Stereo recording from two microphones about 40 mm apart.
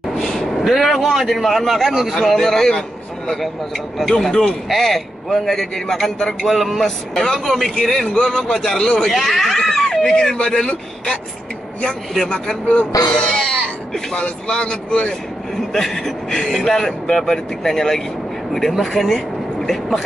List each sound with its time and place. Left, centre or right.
0.2 s vehicle: centre
1.2 s speech: centre
4.2 s speech: centre
9.1 s speech: centre
12.6 s speech: left
13.3 s speech: left
15.7 s speech: centre